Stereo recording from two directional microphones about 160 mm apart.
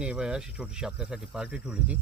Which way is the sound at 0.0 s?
5° right (ahead or behind).